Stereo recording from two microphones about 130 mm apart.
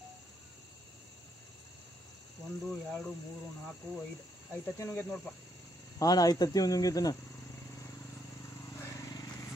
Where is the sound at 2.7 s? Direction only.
5° left (ahead or behind).